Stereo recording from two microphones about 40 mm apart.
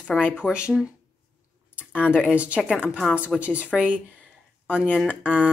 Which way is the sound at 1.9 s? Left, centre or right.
Left.